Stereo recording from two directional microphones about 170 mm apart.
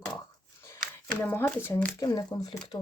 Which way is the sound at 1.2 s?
15° left (ahead or behind).